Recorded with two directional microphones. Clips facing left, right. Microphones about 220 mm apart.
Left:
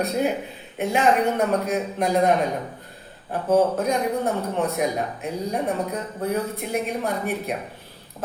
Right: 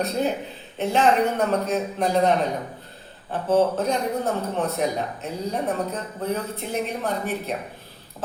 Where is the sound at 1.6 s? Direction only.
10° left (ahead or behind).